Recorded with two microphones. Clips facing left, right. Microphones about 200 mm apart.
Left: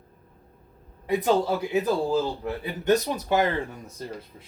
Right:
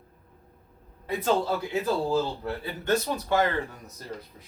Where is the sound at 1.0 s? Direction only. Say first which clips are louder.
Left 3 dB; 15° left (ahead or behind).